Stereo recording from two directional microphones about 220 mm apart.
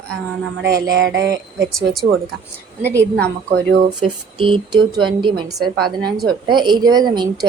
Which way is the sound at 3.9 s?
20° right (ahead or behind).